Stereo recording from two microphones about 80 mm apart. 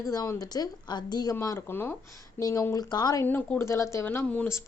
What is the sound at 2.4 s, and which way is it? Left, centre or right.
Speech, left.